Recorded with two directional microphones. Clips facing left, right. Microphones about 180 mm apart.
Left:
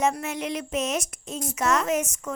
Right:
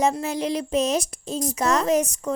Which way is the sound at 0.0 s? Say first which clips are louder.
Right 3 dB; 35° right (ahead or behind).